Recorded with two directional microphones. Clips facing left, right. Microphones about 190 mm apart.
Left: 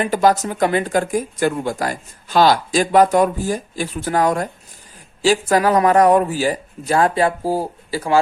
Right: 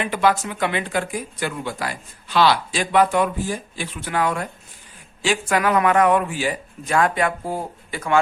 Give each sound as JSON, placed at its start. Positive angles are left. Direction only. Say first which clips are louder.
{"t": 0.0, "sound": "speech", "louder": "left 4 dB", "side_deg": 40}